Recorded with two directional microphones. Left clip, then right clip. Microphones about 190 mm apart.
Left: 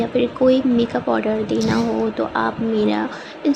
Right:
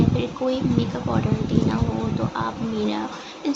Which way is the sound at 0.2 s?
30° left (ahead or behind).